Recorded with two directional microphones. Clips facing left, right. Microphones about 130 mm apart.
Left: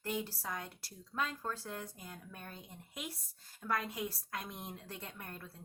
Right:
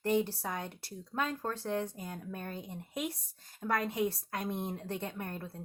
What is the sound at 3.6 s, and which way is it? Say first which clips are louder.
Speech: right 4 dB; 40° right (ahead or behind).